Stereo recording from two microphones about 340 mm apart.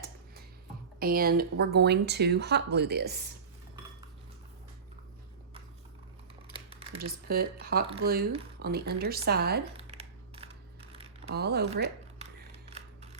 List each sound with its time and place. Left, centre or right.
0.9 s speech: right
6.5 s speech: centre
9.7 s a sound: centre
11.3 s speech: right
12.2 s scissors: centre